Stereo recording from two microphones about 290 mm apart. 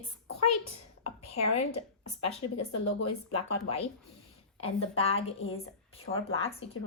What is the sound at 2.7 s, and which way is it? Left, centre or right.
Speech, left.